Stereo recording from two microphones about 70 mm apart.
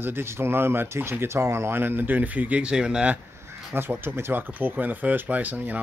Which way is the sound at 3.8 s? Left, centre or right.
Right.